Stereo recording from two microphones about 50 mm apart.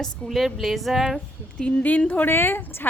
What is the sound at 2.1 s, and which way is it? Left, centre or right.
Speech, left.